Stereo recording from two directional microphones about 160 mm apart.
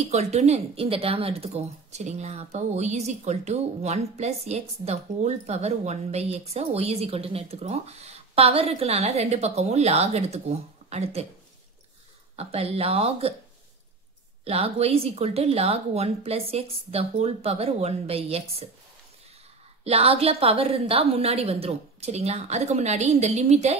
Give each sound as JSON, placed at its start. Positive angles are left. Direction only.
{"t": 0.1, "sound": "a woman's voice", "side_deg": -40}
{"t": 12.4, "sound": "a woman's voice", "side_deg": -40}
{"t": 14.4, "sound": "a woman's voice", "side_deg": -40}
{"t": 19.8, "sound": "a woman's voice", "side_deg": -40}